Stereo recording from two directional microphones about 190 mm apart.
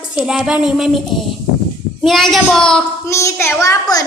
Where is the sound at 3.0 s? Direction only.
15° left (ahead or behind).